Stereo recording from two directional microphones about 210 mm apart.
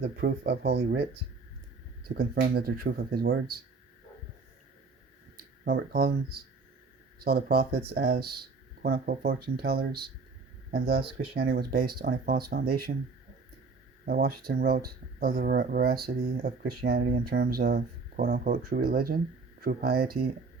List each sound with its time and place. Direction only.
0.0 s speech: 50° right (ahead or behind)
2.0 s speech: 45° right (ahead or behind)
5.6 s speech: 45° right (ahead or behind)